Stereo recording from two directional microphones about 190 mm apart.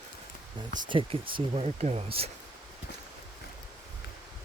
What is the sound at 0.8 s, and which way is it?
Speech, 25° right (ahead or behind).